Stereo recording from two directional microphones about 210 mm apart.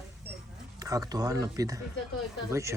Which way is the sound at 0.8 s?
15° right (ahead or behind).